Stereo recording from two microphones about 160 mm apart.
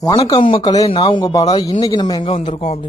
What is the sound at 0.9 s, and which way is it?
Speech, 35° left (ahead or behind).